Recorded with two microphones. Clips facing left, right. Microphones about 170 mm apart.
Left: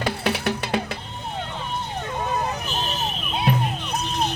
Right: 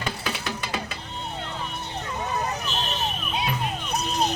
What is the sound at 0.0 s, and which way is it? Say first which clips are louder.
Music: left 7 dB; 60° left (ahead or behind).